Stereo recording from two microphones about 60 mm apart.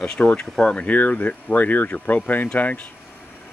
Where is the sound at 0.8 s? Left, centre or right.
Left.